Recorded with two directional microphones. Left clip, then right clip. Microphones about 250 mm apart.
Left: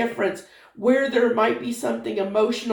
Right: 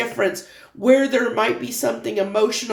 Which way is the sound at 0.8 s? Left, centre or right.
Right.